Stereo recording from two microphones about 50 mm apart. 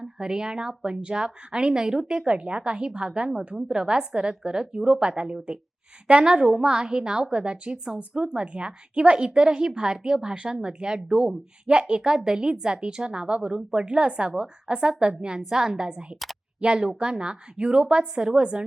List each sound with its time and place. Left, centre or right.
0.0 s speech: centre
11.6 s speech: right
13.6 s speech: centre
13.8 s speech: right